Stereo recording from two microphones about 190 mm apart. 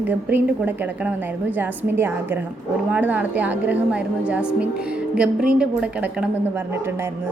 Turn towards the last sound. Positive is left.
turn(degrees=-10)  # may be behind; listen again after turning